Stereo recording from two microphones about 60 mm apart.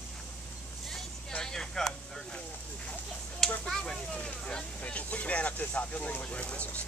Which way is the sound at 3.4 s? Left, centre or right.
Centre.